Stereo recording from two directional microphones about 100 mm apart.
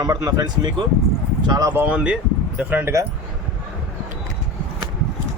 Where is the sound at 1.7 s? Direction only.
20° right (ahead or behind).